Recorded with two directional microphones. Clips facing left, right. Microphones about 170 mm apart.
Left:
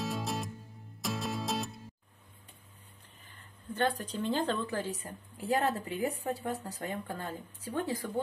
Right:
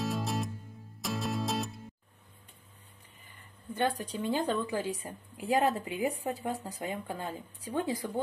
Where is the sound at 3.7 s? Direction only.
10° right (ahead or behind).